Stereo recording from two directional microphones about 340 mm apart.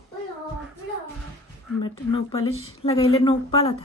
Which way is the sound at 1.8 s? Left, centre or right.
Centre.